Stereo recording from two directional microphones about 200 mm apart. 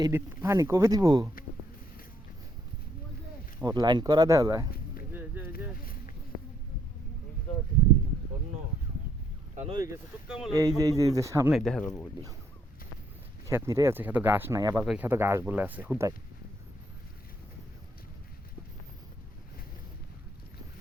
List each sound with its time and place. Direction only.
0.0 s speech: 15° right (ahead or behind)
3.6 s speech: 15° right (ahead or behind)
5.1 s a sound: 10° right (ahead or behind)
5.8 s a sound: 45° left (ahead or behind)
9.7 s speech: 15° right (ahead or behind)
10.2 s speech: centre (ahead or behind)
10.5 s speech: 15° right (ahead or behind)
11.5 s speech: centre (ahead or behind)
13.5 s speech: 15° right (ahead or behind)